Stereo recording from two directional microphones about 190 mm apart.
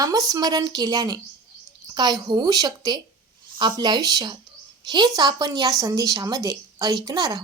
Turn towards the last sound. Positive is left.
turn(degrees=-20)  # may be behind; listen again after turning